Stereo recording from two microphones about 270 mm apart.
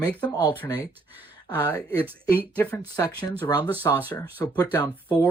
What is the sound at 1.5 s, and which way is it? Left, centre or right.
Speech, centre.